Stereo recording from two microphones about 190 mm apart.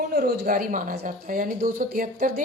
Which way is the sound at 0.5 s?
45° right (ahead or behind).